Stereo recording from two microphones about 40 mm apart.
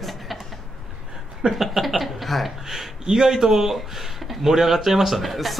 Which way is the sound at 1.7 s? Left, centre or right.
Centre.